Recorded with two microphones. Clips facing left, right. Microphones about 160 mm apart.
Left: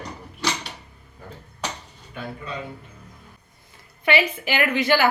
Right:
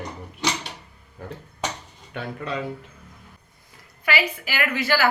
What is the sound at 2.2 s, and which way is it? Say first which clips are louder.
Speech: right 2 dB; 75° right (ahead or behind).